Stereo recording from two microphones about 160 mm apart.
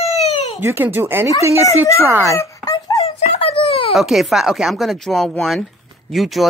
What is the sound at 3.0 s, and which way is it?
Wail, 40° left (ahead or behind).